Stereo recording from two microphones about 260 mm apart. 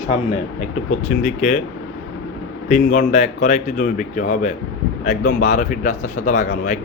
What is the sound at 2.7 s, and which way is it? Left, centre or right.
Speech, left.